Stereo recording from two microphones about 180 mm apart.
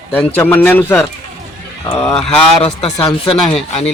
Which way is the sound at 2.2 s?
30° left (ahead or behind).